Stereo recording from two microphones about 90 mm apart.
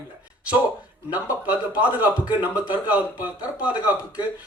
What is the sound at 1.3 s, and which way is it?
A man's voice, 15° right (ahead or behind).